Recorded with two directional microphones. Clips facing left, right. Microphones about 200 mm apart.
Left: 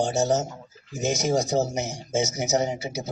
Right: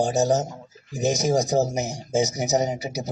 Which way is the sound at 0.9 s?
35° right (ahead or behind).